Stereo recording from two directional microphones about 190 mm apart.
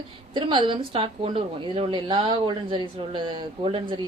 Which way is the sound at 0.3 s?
25° right (ahead or behind).